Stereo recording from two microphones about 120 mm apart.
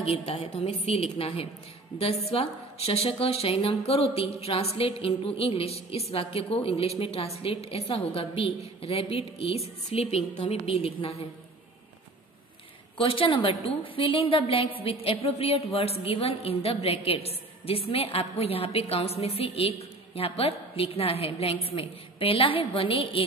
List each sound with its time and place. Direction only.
0.0 s a woman's voice: 55° left (ahead or behind)
12.9 s a woman's voice: 45° left (ahead or behind)